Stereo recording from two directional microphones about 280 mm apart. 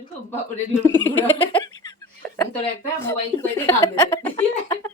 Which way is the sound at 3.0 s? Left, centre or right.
Centre.